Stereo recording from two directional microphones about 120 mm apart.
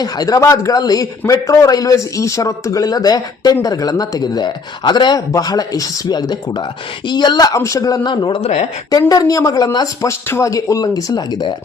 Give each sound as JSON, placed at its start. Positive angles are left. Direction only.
{"t": 0.0, "sound": "a man's voice", "side_deg": 30}
{"t": 8.1, "sound": "speech", "side_deg": 45}
{"t": 8.4, "sound": "a woman's voice", "side_deg": 65}
{"t": 8.9, "sound": "speech", "side_deg": 30}